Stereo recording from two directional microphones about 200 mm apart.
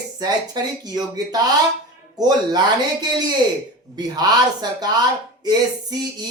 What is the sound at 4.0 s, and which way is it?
Speech, 20° right (ahead or behind).